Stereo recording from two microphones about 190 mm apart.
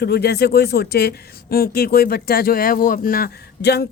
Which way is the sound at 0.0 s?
55° left (ahead or behind).